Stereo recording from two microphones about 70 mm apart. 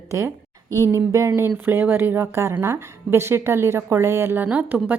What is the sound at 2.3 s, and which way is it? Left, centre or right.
A woman's voice, right.